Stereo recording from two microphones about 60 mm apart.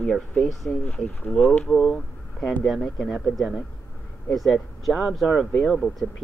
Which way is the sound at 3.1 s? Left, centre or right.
Centre.